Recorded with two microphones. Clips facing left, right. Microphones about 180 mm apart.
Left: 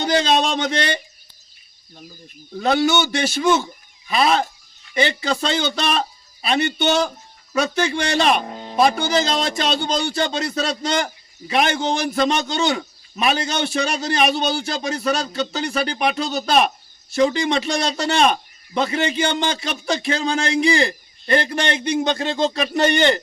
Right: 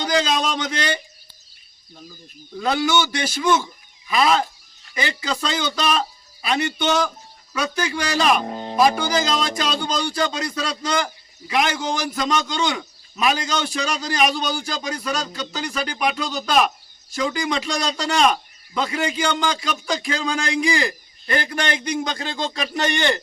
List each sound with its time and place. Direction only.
0.0 s a man's voice: 30° left (ahead or behind)
2.6 s a man's voice: 25° left (ahead or behind)